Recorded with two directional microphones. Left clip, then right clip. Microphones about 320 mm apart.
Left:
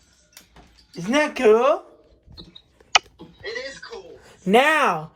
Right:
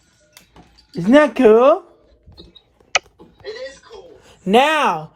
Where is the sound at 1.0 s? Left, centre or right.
Centre.